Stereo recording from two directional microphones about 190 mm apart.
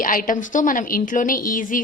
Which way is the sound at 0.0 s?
45° left (ahead or behind).